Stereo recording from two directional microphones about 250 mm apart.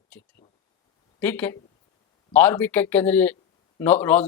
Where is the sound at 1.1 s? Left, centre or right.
Centre.